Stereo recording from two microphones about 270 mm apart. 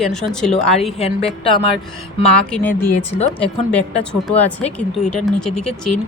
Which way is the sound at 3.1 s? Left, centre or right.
Left.